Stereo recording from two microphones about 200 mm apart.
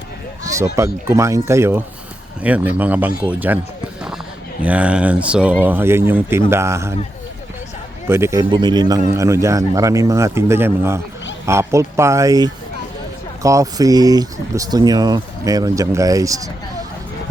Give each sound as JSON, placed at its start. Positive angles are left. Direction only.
{"t": 0.4, "sound": "speech", "side_deg": -15}
{"t": 4.6, "sound": "speech", "side_deg": -5}
{"t": 8.0, "sound": "speech", "side_deg": -15}